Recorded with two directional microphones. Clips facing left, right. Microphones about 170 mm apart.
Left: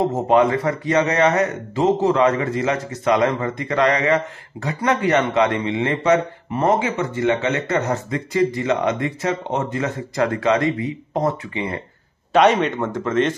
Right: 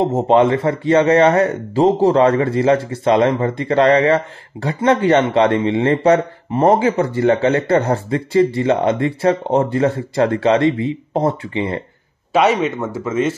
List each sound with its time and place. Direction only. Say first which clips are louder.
0.0 s a man's voice: right 3 dB; 25° right (ahead or behind)
12.3 s a man's voice: even; 5° right (ahead or behind)